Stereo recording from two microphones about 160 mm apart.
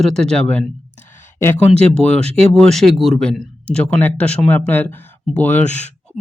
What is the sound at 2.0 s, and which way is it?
Speech, 5° left (ahead or behind).